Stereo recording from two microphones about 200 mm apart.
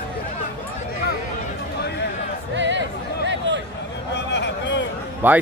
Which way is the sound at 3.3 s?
65° right (ahead or behind).